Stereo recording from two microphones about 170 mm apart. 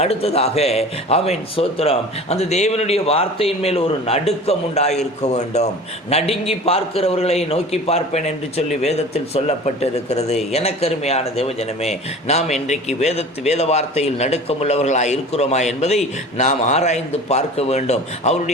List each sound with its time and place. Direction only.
0.0 s a man's voice: 35° left (ahead or behind)